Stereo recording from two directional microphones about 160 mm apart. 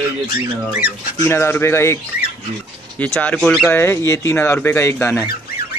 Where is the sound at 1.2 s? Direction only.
15° left (ahead or behind).